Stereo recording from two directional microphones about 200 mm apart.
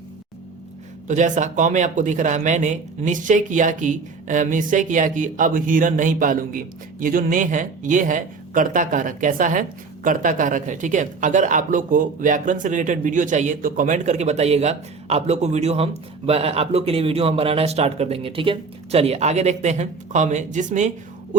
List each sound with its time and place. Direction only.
1.0 s speech: 40° right (ahead or behind)